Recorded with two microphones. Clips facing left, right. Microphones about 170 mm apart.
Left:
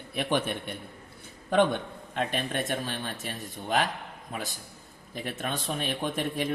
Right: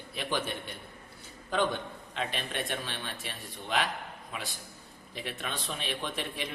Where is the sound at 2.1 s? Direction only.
45° left (ahead or behind).